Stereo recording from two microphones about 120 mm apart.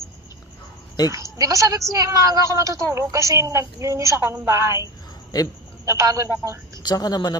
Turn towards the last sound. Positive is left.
turn(degrees=35)  # may be behind; listen again after turning